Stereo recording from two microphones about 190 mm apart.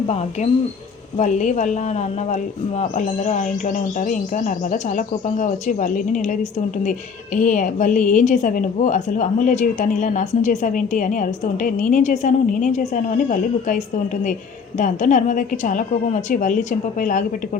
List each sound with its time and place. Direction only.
0.1 s a woman's voice: 35° left (ahead or behind)
7.3 s a woman's voice: 40° left (ahead or behind)
14.8 s a woman's voice: 40° left (ahead or behind)